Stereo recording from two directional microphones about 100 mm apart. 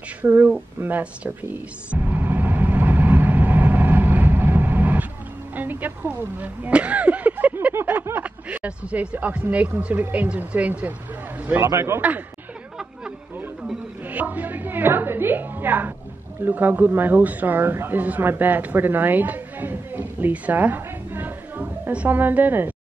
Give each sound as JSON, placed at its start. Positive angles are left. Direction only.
{"t": 0.2, "sound": "music", "side_deg": -15}
{"t": 5.5, "sound": "a sound", "side_deg": -15}
{"t": 8.0, "sound": "a man's voice", "side_deg": -15}
{"t": 14.0, "sound": "a woman's voice", "side_deg": -15}